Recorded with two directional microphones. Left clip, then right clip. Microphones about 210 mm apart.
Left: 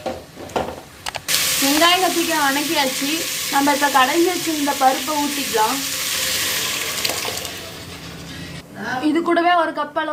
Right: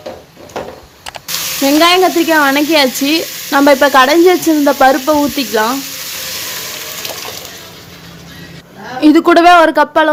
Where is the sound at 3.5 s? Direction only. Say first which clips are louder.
Right 9 dB; 55° right (ahead or behind).